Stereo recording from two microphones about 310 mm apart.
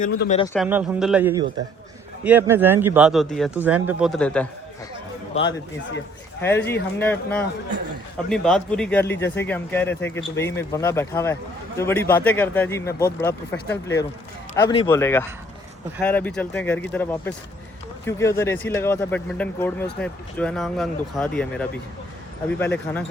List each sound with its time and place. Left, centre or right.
0.2 s speech: left
0.4 s speech: centre
6.4 s speech: centre